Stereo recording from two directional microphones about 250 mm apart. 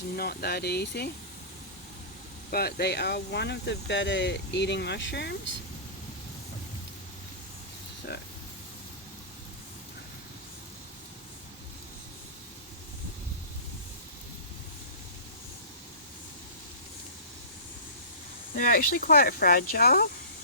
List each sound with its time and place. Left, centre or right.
0.2 s speech: left
2.5 s speech: left
18.5 s speech: left